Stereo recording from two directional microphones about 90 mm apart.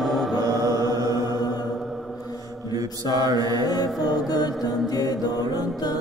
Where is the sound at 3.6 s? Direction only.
50° left (ahead or behind).